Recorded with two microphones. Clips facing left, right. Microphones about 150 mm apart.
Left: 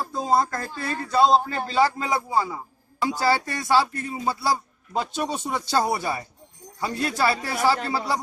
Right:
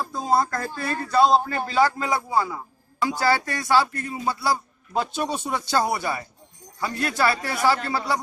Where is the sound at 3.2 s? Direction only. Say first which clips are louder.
Even; 30° left (ahead or behind).